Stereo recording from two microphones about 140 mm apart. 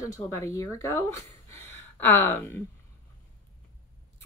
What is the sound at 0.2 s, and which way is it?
Speech, 20° left (ahead or behind).